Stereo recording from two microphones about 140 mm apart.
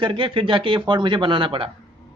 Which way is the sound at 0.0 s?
35° right (ahead or behind).